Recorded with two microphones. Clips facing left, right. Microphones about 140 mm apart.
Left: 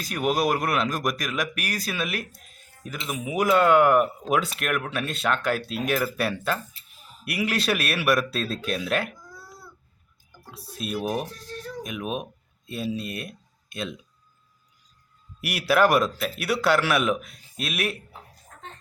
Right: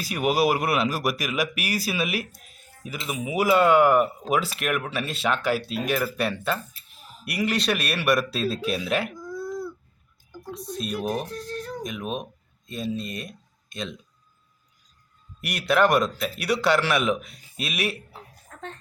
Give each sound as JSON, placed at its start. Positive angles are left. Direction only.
{"t": 0.0, "sound": "speech", "side_deg": -5}
{"t": 10.5, "sound": "speech", "side_deg": 5}
{"t": 15.4, "sound": "speech", "side_deg": 5}
{"t": 18.5, "sound": "a sound", "side_deg": -90}